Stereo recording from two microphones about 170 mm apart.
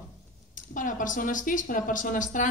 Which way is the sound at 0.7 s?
50° left (ahead or behind).